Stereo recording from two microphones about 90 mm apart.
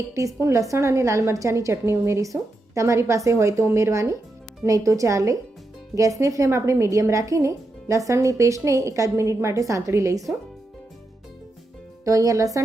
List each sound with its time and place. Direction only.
0.1 s a woman's voice: 35° right (ahead or behind)
12.0 s a woman's voice: 40° right (ahead or behind)